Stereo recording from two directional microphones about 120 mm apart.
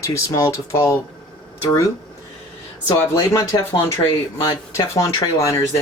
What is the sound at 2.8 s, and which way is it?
Speech, 30° left (ahead or behind).